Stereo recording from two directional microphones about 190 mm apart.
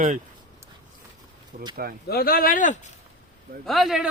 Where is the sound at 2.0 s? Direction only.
55° left (ahead or behind).